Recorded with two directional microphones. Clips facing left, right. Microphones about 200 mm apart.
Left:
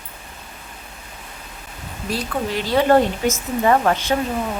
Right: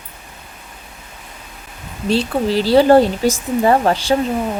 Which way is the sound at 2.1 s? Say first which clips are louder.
Right 7 dB; 30° right (ahead or behind).